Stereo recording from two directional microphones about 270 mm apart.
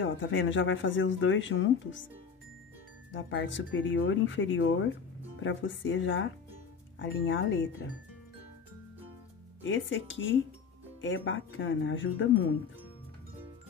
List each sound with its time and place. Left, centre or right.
0.0 s speech: left
3.1 s speech: left
9.6 s speech: left